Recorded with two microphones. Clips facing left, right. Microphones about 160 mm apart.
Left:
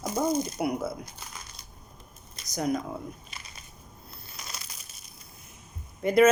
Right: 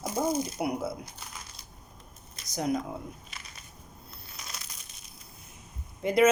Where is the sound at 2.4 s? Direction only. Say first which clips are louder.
Left 1 dB; 25° right (ahead or behind).